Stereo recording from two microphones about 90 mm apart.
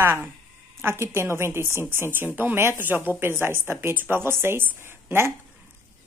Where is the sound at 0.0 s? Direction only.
20° right (ahead or behind).